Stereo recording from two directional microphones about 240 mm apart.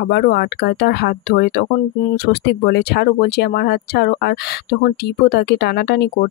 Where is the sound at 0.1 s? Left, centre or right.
Left.